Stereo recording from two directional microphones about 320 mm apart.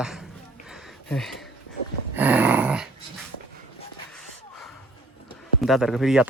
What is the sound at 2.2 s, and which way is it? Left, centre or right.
Dog, centre.